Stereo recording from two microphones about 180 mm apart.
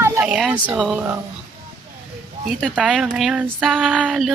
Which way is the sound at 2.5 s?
Centre (ahead or behind).